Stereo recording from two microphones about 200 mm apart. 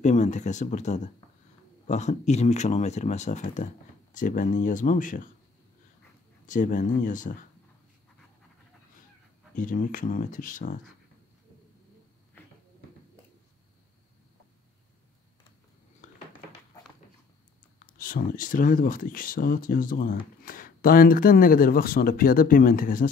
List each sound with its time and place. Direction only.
0.0 s speech: 35° left (ahead or behind)
6.4 s speech: 40° left (ahead or behind)
9.6 s speech: 45° left (ahead or behind)
17.7 s speech: 45° left (ahead or behind)